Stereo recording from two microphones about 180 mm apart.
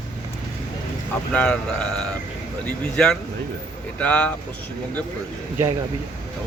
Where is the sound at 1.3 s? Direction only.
5° left (ahead or behind).